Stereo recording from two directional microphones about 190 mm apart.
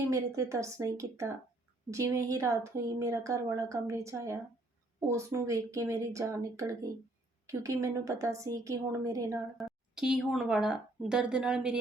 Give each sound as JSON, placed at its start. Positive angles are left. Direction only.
{"t": 0.1, "sound": "speech", "side_deg": -15}
{"t": 9.6, "sound": "a woman's voice", "side_deg": 0}